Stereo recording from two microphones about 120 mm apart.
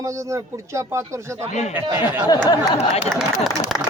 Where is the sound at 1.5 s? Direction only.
70° left (ahead or behind).